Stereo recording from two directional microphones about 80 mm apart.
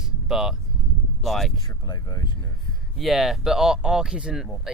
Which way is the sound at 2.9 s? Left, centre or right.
Centre.